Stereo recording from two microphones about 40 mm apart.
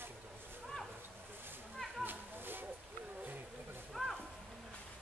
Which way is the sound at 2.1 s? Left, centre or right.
Right.